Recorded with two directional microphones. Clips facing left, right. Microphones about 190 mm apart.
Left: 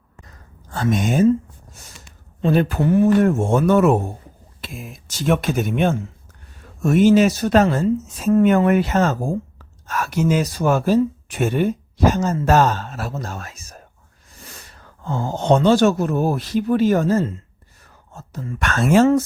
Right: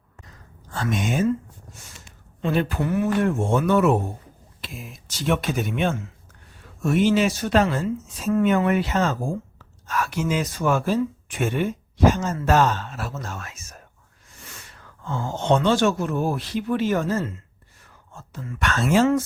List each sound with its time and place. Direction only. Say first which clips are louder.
0.7 s speech: left 5 dB; 40° left (ahead or behind)
2.4 s speech: left 5 dB; 40° left (ahead or behind)
2.8 s speech: left 10 dB; 30° left (ahead or behind)
3.2 s speech: left 4 dB; 45° left (ahead or behind)
15.0 s speech: left 4 dB; 35° left (ahead or behind)